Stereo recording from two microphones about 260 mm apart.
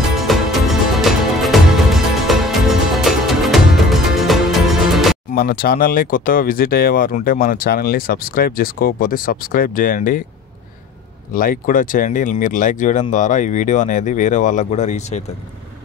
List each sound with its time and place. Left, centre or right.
0.1 s music: centre
5.3 s speech: left
11.3 s speech: left